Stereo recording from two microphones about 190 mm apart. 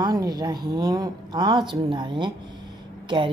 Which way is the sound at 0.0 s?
20° right (ahead or behind).